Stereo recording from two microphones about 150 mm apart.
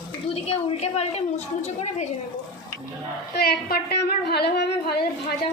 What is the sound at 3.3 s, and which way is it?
A woman's voice, 90° left.